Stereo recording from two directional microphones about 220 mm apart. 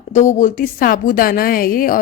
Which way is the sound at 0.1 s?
35° left (ahead or behind).